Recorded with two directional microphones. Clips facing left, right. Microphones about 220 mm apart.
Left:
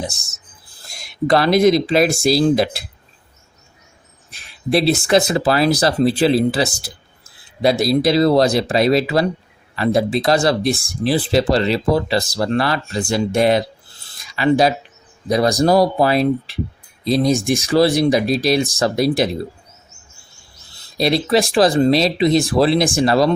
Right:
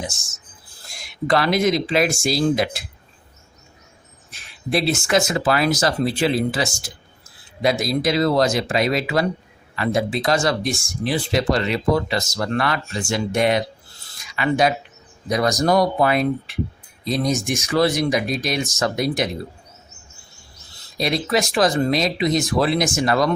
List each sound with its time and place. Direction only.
1.0 s speech: 35° left (ahead or behind)
4.3 s speech: 35° left (ahead or behind)
21.0 s speech: 35° left (ahead or behind)